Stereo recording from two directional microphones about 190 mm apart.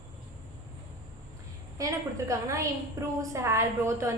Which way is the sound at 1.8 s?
15° right (ahead or behind).